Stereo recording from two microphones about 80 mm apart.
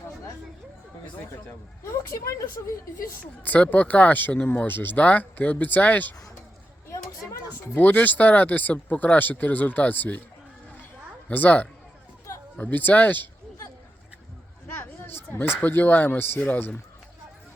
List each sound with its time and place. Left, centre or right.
1.9 s a woman's voice: left
3.4 s speech: left
7.8 s speech: left
11.3 s speech: left
14.8 s speech: left